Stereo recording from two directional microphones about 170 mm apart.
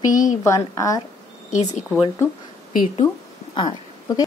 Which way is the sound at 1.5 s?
40° left (ahead or behind).